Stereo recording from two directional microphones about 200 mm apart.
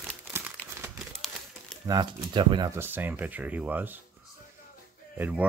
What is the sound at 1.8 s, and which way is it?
Speech, 20° right (ahead or behind).